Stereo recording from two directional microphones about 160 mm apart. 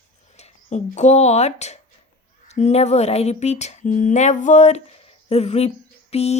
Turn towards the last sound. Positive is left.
turn(degrees=40)  # may be behind; listen again after turning